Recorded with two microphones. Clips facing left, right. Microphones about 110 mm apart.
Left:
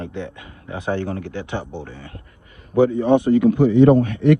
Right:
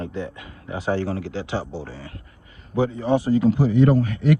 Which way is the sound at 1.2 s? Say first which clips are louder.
Even; 55° left (ahead or behind).